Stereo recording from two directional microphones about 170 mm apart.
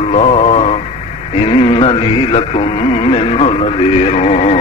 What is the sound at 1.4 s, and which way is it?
Speech, 30° left (ahead or behind).